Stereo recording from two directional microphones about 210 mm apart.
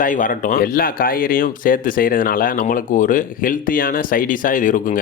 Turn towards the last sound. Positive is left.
turn(degrees=40)  # may be behind; listen again after turning